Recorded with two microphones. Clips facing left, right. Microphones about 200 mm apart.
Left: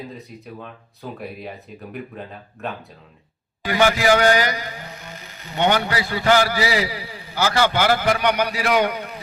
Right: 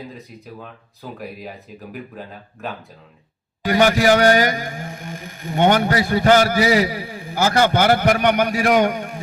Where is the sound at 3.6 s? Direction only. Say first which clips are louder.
Right 2 dB; 45° right (ahead or behind).